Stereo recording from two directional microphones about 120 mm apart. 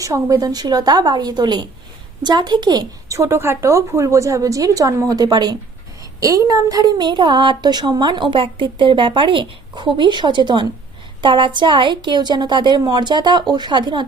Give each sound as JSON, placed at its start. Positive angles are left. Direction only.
{"t": 0.0, "sound": "a woman's voice", "side_deg": -30}